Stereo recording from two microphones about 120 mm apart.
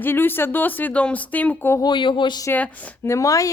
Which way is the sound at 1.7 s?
40° left (ahead or behind).